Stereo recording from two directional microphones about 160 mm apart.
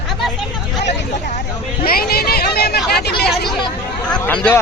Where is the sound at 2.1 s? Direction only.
75° left (ahead or behind).